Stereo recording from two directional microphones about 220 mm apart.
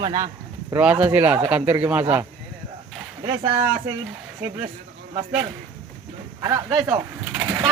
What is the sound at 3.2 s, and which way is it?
Speech, 20° right (ahead or behind).